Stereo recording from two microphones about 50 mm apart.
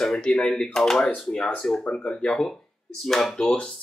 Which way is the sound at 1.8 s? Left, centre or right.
Left.